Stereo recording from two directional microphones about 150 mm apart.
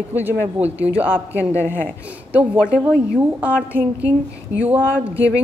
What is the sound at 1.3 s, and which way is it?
Speech, 15° left (ahead or behind).